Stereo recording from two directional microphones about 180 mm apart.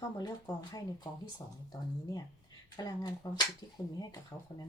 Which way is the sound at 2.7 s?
20° left (ahead or behind).